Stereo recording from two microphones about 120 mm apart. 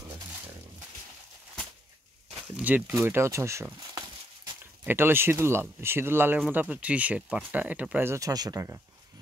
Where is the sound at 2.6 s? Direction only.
15° right (ahead or behind).